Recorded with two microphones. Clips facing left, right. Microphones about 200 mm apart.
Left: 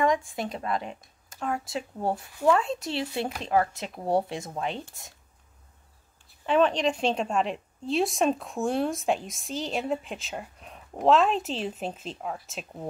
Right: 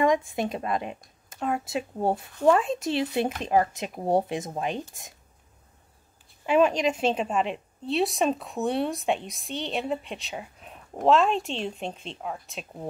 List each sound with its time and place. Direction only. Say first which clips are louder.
0.0 s speech: right 2 dB; 20° right (ahead or behind)
6.4 s a woman's voice: right 1 dB; 10° right (ahead or behind)